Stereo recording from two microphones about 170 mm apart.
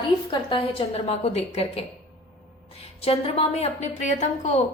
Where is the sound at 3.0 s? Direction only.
35° left (ahead or behind).